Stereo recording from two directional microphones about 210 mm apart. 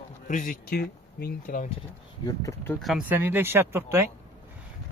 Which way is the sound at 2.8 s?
Centre (ahead or behind).